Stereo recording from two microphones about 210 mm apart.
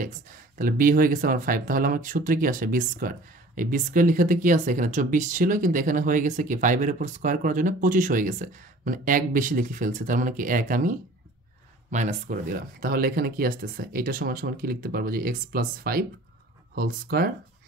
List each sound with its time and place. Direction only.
0.6 s speech: 40° right (ahead or behind)